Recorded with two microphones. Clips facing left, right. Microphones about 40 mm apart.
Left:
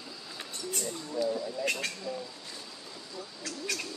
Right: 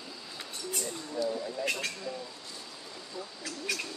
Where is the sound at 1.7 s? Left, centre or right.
Centre.